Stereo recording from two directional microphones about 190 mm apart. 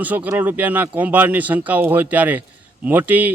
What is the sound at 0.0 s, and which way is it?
Speech, 10° right (ahead or behind).